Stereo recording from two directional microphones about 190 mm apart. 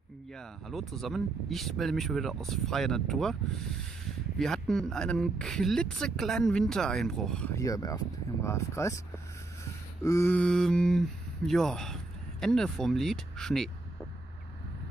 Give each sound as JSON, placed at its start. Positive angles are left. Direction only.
{"t": 0.4, "sound": "speech", "side_deg": 0}
{"t": 4.4, "sound": "speech", "side_deg": 5}
{"t": 7.5, "sound": "speech", "side_deg": 20}
{"t": 10.0, "sound": "speech", "side_deg": 15}